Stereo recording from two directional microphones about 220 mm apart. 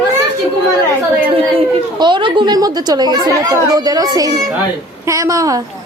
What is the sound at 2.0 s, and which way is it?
A woman's voice, 20° right (ahead or behind).